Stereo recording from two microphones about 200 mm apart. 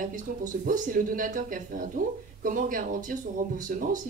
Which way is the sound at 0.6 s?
40° right (ahead or behind).